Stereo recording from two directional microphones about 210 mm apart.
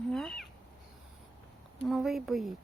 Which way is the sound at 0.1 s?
Centre (ahead or behind).